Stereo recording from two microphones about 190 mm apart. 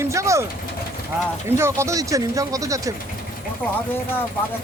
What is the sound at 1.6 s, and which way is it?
Speech, 15° right (ahead or behind).